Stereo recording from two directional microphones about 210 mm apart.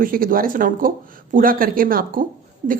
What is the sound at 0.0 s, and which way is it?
A woman's voice, 40° right (ahead or behind).